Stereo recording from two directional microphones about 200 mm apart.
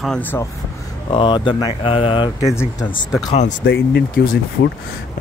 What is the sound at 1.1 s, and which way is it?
Speech, 25° left (ahead or behind).